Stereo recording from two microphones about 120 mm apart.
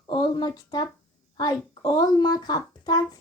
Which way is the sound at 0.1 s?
35° left (ahead or behind).